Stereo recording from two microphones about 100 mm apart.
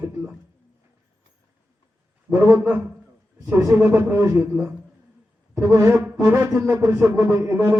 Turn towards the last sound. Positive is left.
turn(degrees=-20)  # may be behind; listen again after turning